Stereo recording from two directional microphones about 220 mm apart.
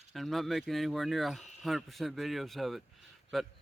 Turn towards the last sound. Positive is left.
turn(degrees=0)  # may be behind; listen again after turning